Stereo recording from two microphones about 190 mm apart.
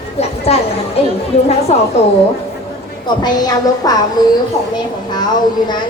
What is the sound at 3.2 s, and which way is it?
A woman's voice, 20° left (ahead or behind).